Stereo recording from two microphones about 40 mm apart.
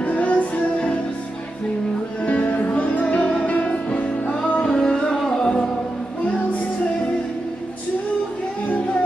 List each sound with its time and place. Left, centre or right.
0.0 s music: left
2.2 s music: left
4.7 s music: centre